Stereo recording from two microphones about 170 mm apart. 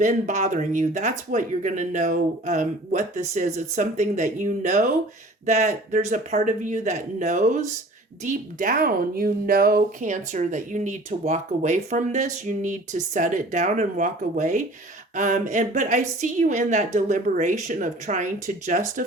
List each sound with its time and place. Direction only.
0.0 s speech: 45° right (ahead or behind)